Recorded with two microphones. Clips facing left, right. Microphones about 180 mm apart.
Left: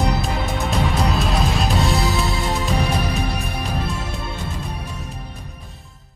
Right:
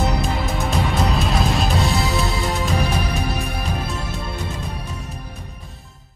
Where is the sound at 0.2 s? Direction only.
Centre (ahead or behind).